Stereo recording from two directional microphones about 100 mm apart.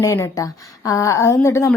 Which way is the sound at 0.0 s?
30° left (ahead or behind).